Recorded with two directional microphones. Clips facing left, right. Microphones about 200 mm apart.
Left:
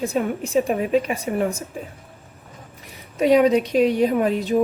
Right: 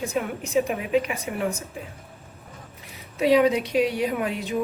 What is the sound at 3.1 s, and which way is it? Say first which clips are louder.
Speech: left 3 dB; 40° left (ahead or behind).